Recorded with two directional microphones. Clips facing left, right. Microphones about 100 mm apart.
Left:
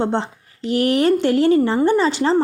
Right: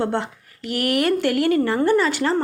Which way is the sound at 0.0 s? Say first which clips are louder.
Left 2 dB; 25° left (ahead or behind).